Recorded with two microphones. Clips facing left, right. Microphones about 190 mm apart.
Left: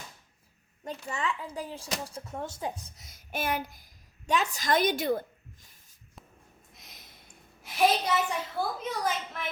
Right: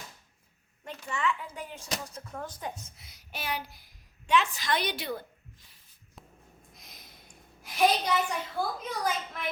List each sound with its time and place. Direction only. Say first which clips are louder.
1.0 s speech: right 2 dB; 35° left (ahead or behind)
3.0 s a woman's voice: left 9 dB; 50° left (ahead or behind)
6.7 s a woman's voice: left 1 dB; centre (ahead or behind)